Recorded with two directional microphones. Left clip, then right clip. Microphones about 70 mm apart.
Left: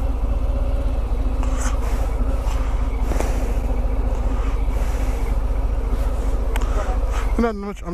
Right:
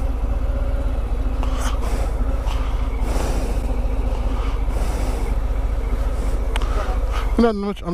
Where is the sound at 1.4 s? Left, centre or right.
Right.